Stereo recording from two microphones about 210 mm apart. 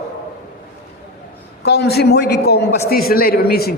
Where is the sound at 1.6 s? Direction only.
50° left (ahead or behind).